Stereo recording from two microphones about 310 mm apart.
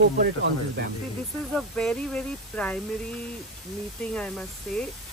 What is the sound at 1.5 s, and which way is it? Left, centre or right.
Speech, centre.